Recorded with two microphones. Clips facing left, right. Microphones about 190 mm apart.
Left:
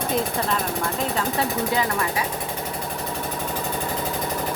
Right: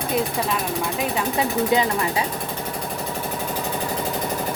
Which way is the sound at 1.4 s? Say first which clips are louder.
Right 6 dB; 20° right (ahead or behind).